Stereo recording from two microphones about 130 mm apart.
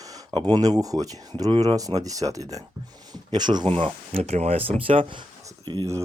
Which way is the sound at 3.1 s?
35° right (ahead or behind).